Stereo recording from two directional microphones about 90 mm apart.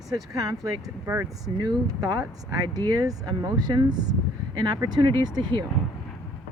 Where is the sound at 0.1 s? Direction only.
40° right (ahead or behind).